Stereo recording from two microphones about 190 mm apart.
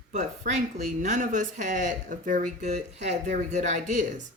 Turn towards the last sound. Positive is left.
turn(degrees=-40)  # may be behind; listen again after turning